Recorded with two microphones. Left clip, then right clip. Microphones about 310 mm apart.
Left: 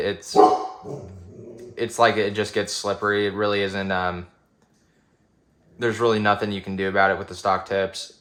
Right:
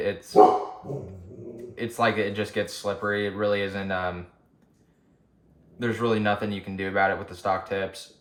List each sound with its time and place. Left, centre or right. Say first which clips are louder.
0.0 s speech: left 3 dB; left
1.7 s speech: left 6 dB; left
5.8 s speech: left 5 dB; left